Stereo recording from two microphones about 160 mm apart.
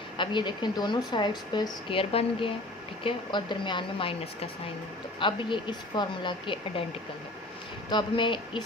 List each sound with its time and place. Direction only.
0.2 s speech: 30° left (ahead or behind)
7.9 s speech: 30° left (ahead or behind)